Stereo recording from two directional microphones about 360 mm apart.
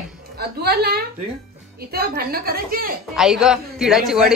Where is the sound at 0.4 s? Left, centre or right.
Right.